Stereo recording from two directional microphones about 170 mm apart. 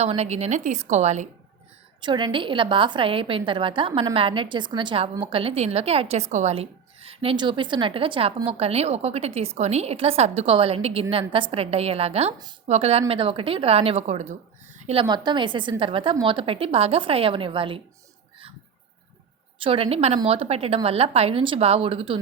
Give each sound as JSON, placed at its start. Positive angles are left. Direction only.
{"t": 0.0, "sound": "a woman's voice", "side_deg": -40}
{"t": 2.0, "sound": "a woman's voice", "side_deg": -25}
{"t": 15.0, "sound": "a woman's voice", "side_deg": -25}
{"t": 19.5, "sound": "a woman's voice", "side_deg": -30}